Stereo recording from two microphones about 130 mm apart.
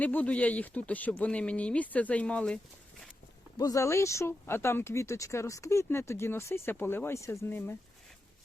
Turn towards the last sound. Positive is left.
turn(degrees=15)  # may be behind; listen again after turning